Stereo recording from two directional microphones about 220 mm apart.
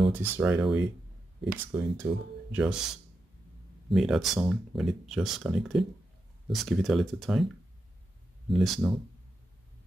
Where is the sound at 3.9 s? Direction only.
Centre (ahead or behind).